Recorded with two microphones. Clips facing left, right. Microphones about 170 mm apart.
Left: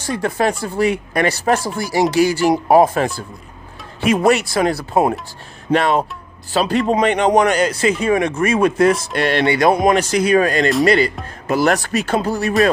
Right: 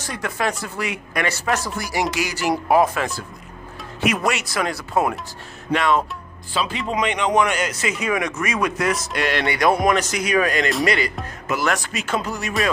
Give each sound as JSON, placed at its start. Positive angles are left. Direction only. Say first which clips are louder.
{"t": 0.0, "sound": "speech", "louder": "left 6 dB", "side_deg": 30}
{"t": 4.3, "sound": "speech", "louder": "left 8 dB", "side_deg": 30}